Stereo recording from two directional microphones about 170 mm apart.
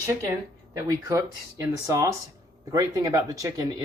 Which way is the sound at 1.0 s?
15° right (ahead or behind).